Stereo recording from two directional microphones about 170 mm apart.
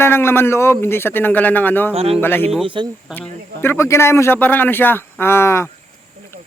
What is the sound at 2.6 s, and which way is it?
Speech, 25° right (ahead or behind).